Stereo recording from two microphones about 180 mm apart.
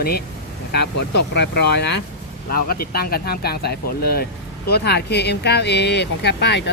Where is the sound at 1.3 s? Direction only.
70° left (ahead or behind).